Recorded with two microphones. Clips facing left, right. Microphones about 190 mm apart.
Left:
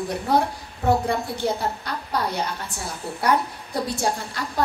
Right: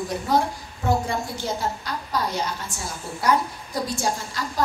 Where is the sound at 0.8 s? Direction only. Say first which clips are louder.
Left 2 dB; 60° left (ahead or behind).